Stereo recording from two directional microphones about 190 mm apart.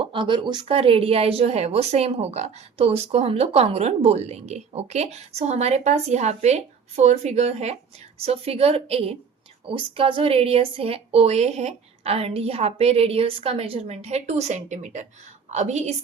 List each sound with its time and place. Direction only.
0.0 s a woman's voice: 25° right (ahead or behind)